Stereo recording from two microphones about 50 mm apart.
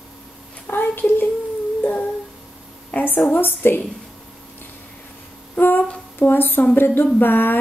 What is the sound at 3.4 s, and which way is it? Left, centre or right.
Speech, left.